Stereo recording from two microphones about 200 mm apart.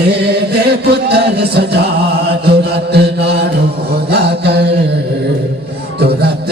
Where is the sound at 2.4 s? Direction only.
55° right (ahead or behind).